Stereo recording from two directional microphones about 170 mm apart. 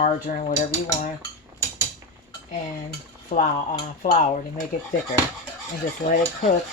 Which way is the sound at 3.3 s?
50° left (ahead or behind).